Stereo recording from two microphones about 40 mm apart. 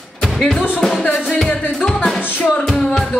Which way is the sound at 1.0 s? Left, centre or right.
Left.